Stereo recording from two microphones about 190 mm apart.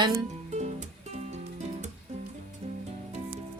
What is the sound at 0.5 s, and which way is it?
Music, 35° right (ahead or behind).